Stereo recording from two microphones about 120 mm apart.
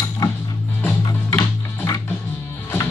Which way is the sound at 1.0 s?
25° left (ahead or behind).